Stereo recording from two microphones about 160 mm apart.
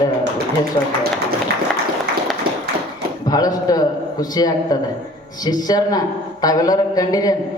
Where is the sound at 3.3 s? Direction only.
25° left (ahead or behind).